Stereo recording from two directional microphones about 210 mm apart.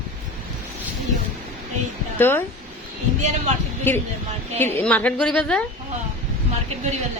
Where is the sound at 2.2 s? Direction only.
10° left (ahead or behind).